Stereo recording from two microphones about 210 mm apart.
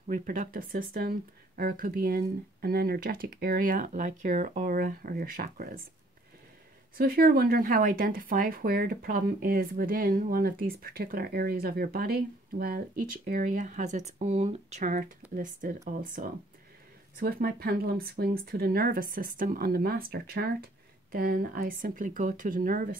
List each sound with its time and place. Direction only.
0.1 s speech: 40° right (ahead or behind)
7.0 s speech: 45° right (ahead or behind)